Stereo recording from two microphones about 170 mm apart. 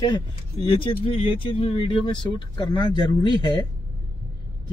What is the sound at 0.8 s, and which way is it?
Speech, 30° left (ahead or behind).